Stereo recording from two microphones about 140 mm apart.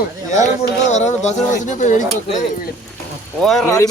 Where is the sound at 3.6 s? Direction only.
20° left (ahead or behind).